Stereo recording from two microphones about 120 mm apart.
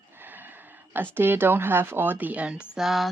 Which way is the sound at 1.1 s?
20° right (ahead or behind).